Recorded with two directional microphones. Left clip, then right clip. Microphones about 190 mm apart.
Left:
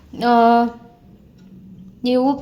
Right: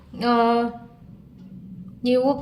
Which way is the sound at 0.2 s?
35° left (ahead or behind).